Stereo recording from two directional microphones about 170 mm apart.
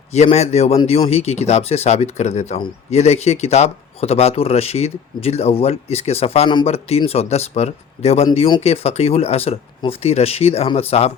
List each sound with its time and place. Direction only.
0.1 s speech: 40° left (ahead or behind)